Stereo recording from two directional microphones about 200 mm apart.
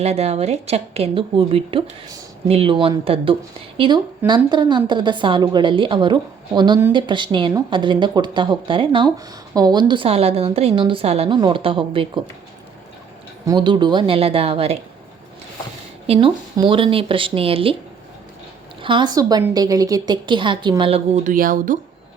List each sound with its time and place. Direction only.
0.0 s a woman's voice: 30° right (ahead or behind)
13.5 s speech: 25° right (ahead or behind)
16.0 s speech: 25° right (ahead or behind)
18.8 s speech: 25° right (ahead or behind)
21.2 s a woman's voice: 40° right (ahead or behind)